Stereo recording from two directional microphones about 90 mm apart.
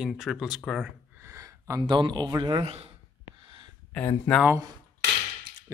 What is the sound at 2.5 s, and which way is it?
Speech, 90° right.